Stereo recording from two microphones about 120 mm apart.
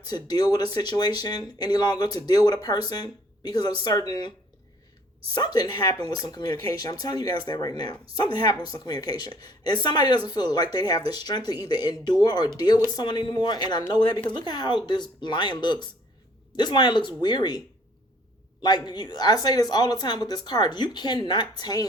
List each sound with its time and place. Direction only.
0.1 s speech: 35° left (ahead or behind)
5.3 s speech: 35° left (ahead or behind)
18.6 s speech: 35° left (ahead or behind)